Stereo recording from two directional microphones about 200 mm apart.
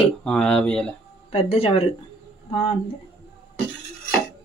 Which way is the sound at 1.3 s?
30° left (ahead or behind).